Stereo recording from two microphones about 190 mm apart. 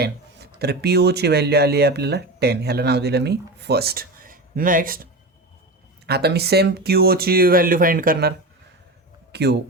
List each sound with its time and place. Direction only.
0.0 s speech: 55° right (ahead or behind)
6.1 s speech: 55° right (ahead or behind)
9.3 s speech: 60° right (ahead or behind)